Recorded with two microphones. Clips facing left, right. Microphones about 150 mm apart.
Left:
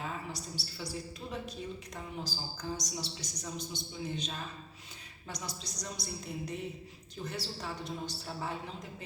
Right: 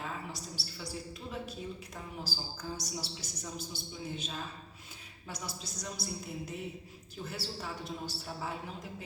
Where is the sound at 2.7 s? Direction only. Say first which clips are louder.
Left 1 dB; 5° right (ahead or behind).